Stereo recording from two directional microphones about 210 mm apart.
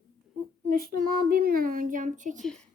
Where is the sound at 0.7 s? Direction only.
45° right (ahead or behind).